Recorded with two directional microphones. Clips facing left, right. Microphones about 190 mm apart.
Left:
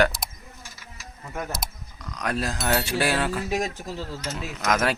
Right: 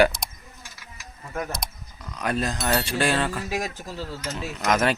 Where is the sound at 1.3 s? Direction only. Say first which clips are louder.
Right 1 dB; centre (ahead or behind).